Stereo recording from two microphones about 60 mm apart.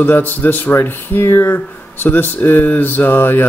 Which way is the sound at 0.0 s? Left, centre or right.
Left.